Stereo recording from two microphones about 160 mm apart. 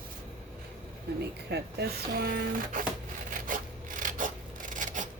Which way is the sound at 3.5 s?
55° right (ahead or behind).